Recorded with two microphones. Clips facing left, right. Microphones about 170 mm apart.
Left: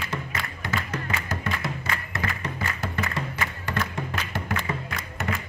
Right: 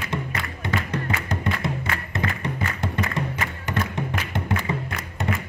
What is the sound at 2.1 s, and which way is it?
Music, 20° right (ahead or behind).